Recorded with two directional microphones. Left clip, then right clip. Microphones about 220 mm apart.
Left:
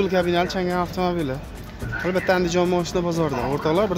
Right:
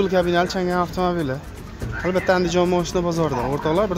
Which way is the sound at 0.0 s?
10° right (ahead or behind).